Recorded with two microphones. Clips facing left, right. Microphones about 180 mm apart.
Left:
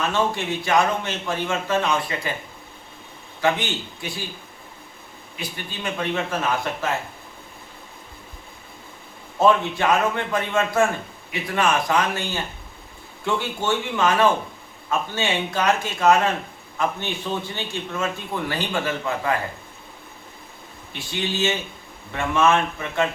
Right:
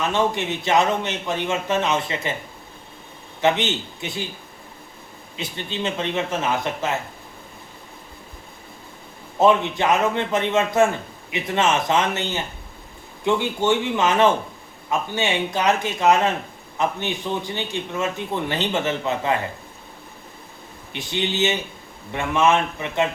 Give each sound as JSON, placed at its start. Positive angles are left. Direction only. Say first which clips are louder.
{"t": 0.1, "sound": "a man's voice", "louder": "right 1 dB", "side_deg": -20}
{"t": 3.4, "sound": "a man's voice", "louder": "right 2 dB", "side_deg": -20}
{"t": 5.4, "sound": "a man's voice", "louder": "right 4 dB", "side_deg": -25}
{"t": 9.4, "sound": "a man's voice", "louder": "right 1 dB", "side_deg": -20}
{"t": 20.9, "sound": "a man's voice", "louder": "right 2 dB", "side_deg": -20}